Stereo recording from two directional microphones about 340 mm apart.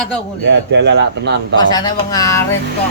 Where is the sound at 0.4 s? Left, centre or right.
Right.